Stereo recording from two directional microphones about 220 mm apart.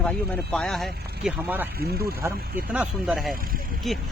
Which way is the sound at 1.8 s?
45° right (ahead or behind).